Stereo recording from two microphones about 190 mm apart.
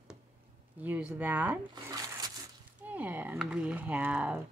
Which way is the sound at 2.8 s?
10° right (ahead or behind).